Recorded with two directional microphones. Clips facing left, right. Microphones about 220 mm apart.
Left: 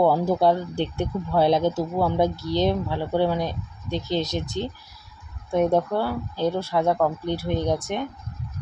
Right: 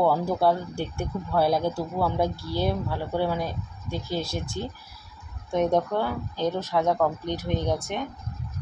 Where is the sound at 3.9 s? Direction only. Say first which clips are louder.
Left 4 dB; 20° left (ahead or behind).